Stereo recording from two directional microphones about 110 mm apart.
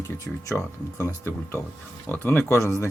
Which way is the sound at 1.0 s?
20° left (ahead or behind).